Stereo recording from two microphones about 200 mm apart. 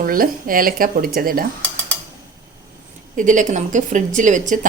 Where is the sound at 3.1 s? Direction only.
40° right (ahead or behind).